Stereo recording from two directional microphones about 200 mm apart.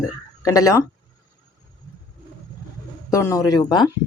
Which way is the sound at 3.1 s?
15° left (ahead or behind).